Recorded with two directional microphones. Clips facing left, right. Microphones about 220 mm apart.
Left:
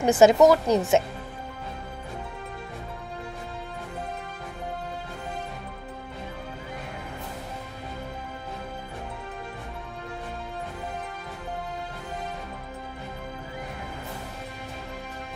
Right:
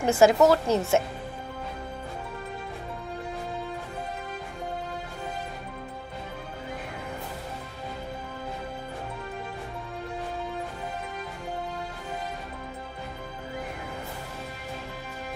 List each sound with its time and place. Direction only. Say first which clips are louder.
0.0 s a woman's voice: left 3 dB; 20° left (ahead or behind)